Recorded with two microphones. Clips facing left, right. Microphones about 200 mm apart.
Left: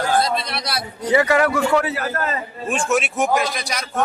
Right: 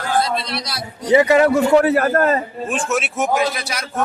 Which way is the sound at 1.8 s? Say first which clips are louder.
Right 9 dB; 55° right (ahead or behind).